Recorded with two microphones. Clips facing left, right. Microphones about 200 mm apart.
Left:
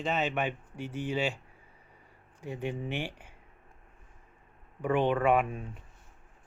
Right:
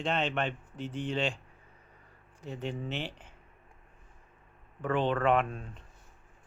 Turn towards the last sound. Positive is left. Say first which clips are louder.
# left 1 dB
turn(degrees=10)  # may be behind; listen again after turning